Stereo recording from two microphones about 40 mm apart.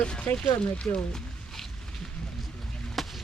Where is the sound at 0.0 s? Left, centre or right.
Left.